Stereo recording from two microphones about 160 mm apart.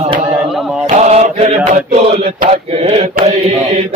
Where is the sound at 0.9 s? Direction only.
45° right (ahead or behind).